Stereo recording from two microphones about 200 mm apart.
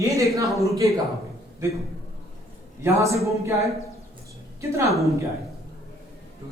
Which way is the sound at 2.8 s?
15° right (ahead or behind).